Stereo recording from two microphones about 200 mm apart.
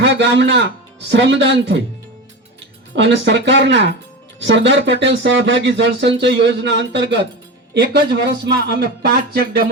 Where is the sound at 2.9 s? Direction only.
60° right (ahead or behind).